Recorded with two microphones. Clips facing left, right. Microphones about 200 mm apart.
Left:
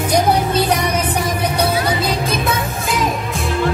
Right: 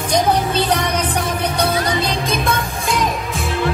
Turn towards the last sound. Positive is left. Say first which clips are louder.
# even
turn(degrees=5)  # may be behind; listen again after turning